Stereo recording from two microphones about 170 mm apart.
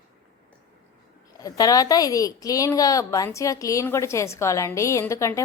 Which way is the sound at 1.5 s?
20° left (ahead or behind).